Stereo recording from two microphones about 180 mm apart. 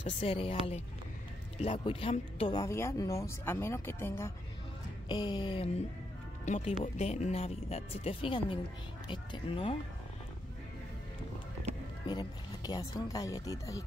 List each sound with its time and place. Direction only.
0.0 s speech: 30° left (ahead or behind)
2.7 s speech: 15° left (ahead or behind)
5.0 s speech: 25° left (ahead or behind)
6.4 s speech: 40° left (ahead or behind)
12.1 s speech: 25° left (ahead or behind)